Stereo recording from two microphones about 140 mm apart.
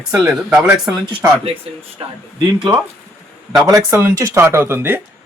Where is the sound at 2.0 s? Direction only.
40° right (ahead or behind).